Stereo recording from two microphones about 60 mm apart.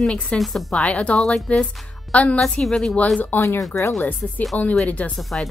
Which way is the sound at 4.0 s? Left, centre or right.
Left.